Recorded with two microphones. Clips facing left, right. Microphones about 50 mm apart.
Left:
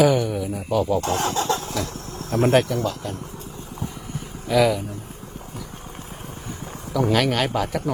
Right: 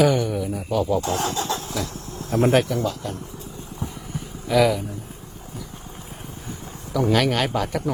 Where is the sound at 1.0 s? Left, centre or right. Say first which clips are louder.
Left 2 dB; left.